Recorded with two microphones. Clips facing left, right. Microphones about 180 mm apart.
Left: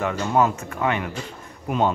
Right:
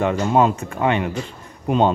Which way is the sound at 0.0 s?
25° right (ahead or behind).